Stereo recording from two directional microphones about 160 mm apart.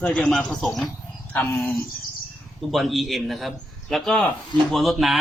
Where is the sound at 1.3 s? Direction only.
10° left (ahead or behind).